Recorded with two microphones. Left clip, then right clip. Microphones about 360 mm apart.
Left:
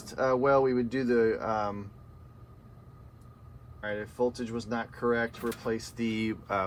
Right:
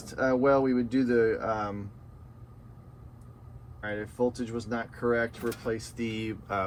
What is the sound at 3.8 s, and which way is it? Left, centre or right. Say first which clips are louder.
Speech: even; centre.